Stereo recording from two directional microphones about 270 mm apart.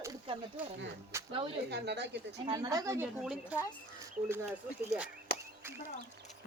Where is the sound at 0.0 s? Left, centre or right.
Centre.